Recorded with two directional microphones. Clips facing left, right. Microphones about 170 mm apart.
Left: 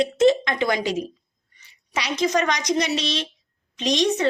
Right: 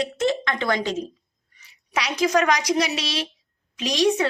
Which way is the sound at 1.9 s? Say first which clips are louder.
Right 1 dB; 5° right (ahead or behind).